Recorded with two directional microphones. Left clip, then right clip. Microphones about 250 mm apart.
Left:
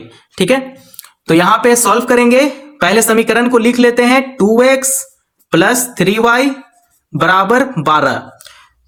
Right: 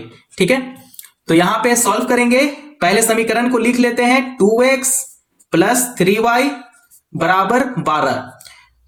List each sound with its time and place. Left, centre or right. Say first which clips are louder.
0.3 s speech: left 3 dB; left